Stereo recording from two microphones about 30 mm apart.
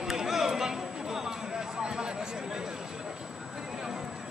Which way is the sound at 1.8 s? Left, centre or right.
Right.